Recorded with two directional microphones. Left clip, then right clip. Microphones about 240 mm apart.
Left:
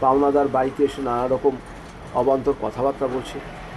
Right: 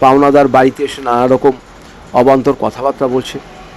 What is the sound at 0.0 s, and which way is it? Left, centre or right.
A man's voice, right.